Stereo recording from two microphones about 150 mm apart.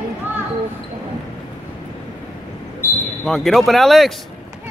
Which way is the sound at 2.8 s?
20° left (ahead or behind).